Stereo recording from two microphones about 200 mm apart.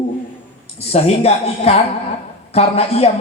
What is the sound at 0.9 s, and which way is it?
Speech, 30° left (ahead or behind).